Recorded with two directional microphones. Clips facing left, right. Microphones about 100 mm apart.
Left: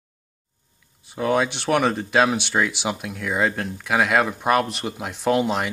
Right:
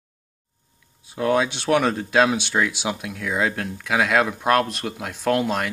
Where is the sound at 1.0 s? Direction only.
Centre (ahead or behind).